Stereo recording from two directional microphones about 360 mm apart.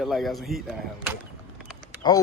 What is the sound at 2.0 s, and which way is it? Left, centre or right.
Speech, centre.